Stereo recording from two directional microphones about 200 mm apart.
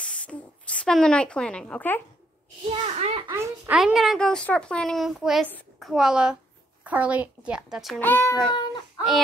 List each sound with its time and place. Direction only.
0.0 s a sound: 5° left (ahead or behind)
2.7 s a child's voice: 30° right (ahead or behind)
3.3 s a woman's voice: 10° right (ahead or behind)
8.1 s child singing: 10° left (ahead or behind)
8.5 s baby cry: 20° left (ahead or behind)